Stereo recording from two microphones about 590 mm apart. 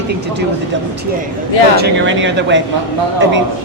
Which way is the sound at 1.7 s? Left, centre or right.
Centre.